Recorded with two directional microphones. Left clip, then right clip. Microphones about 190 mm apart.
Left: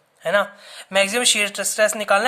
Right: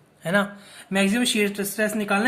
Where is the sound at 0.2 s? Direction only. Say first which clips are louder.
Left 4 dB; 40° left (ahead or behind).